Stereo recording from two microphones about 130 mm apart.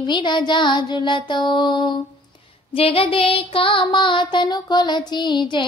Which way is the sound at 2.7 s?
45° left (ahead or behind).